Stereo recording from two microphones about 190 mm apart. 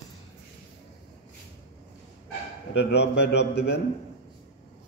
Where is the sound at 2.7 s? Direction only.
60° left (ahead or behind).